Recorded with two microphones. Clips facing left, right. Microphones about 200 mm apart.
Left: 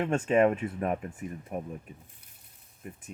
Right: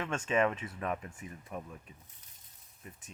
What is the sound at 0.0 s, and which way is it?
Speech, 40° left (ahead or behind).